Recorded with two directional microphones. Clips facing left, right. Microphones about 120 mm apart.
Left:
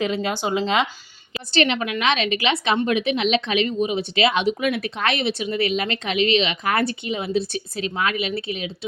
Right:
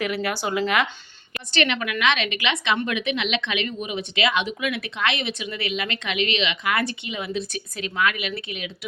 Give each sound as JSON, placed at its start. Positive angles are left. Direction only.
{"t": 0.0, "sound": "speech", "side_deg": 25}